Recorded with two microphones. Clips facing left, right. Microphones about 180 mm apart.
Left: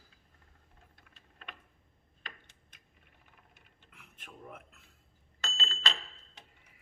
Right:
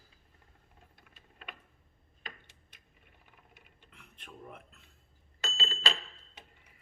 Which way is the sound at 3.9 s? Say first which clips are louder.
Right 1 dB; 5° left (ahead or behind).